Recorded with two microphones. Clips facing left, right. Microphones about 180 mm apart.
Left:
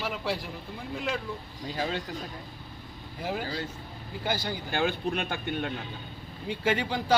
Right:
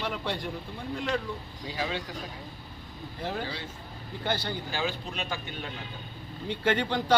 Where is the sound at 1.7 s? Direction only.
45° left (ahead or behind).